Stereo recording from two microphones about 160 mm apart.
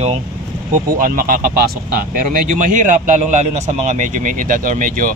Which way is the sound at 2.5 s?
55° right (ahead or behind).